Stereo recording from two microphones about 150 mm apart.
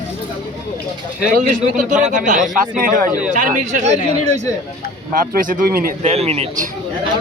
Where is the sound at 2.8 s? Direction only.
70° right (ahead or behind); by 4.5 s 50° right (ahead or behind).